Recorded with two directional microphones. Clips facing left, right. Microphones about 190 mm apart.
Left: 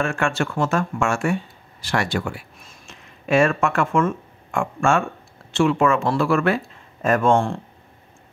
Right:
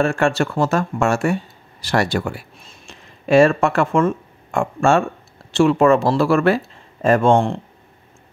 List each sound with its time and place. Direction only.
0.0 s speech: 35° right (ahead or behind)
2.6 s speech: 30° right (ahead or behind)